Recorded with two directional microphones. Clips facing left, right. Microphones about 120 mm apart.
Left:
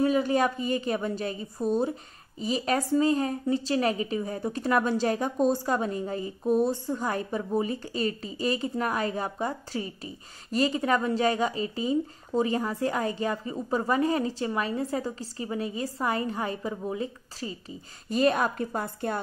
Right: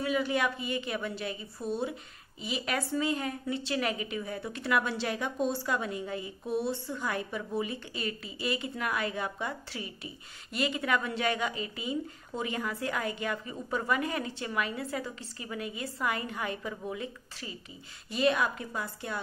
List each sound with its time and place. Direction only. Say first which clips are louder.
0.0 s a woman's voice: left 6 dB; 40° left (ahead or behind)